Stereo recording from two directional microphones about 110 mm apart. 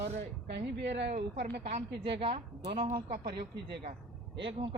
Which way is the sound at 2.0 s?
55° right (ahead or behind).